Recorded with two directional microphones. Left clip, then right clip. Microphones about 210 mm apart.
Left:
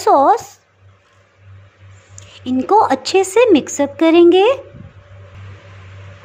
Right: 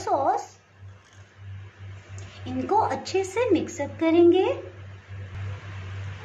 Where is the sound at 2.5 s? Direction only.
40° left (ahead or behind).